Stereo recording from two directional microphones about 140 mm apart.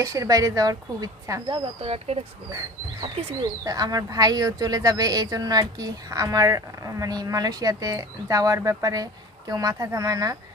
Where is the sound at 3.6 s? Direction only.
25° right (ahead or behind).